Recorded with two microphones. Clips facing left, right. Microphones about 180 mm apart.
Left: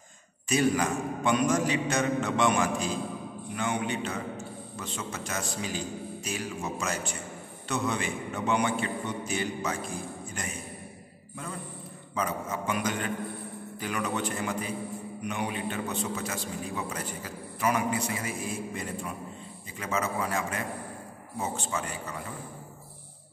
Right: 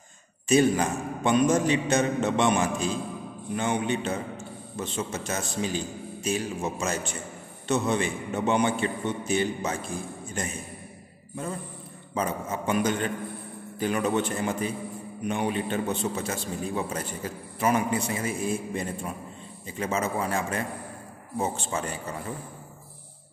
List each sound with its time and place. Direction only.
0.5 s a man's voice: 25° right (ahead or behind)
12.1 s a man's voice: 30° right (ahead or behind)